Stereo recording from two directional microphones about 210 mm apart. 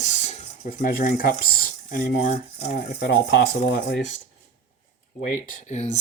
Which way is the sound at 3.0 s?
55° left (ahead or behind).